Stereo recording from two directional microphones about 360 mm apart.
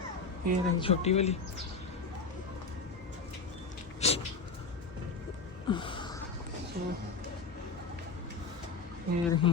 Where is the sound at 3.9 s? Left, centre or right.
Centre.